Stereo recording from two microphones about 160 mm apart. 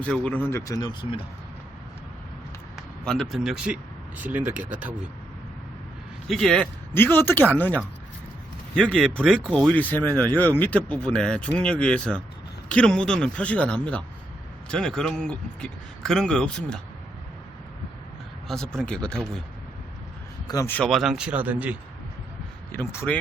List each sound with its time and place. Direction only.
0.0 s speech: 10° left (ahead or behind); by 1.2 s 25° left (ahead or behind)
2.7 s speech: 5° left (ahead or behind)
6.2 s speech: centre (ahead or behind)
6.9 s speech: 15° left (ahead or behind)
8.7 s speech: 5° left (ahead or behind)
18.4 s speech: 5° left (ahead or behind)
20.5 s speech: 20° left (ahead or behind)
20.7 s speech: centre (ahead or behind)
22.7 s speech: 15° left (ahead or behind)